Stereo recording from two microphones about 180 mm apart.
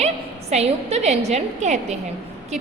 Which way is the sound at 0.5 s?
35° right (ahead or behind).